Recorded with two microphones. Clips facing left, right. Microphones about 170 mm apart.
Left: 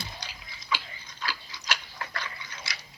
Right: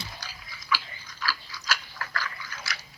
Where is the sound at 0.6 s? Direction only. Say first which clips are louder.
Right 2 dB; 20° left (ahead or behind).